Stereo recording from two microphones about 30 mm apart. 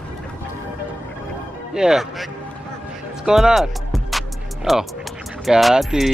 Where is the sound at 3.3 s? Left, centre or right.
Right.